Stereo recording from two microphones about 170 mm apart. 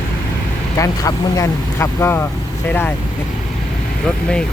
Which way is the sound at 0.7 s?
20° left (ahead or behind).